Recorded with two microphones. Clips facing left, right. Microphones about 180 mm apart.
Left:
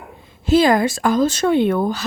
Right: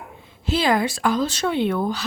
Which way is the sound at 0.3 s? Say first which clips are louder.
Left 7 dB; 45° left (ahead or behind).